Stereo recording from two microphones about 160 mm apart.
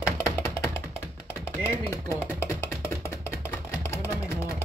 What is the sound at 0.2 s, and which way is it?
Music, 15° left (ahead or behind).